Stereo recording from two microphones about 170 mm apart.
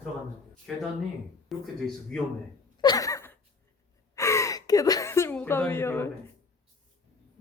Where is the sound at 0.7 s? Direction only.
Centre (ahead or behind).